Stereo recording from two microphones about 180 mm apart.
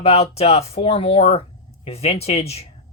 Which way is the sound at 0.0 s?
35° left (ahead or behind).